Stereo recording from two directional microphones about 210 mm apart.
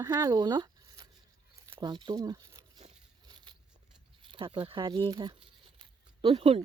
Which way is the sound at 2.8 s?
20° right (ahead or behind).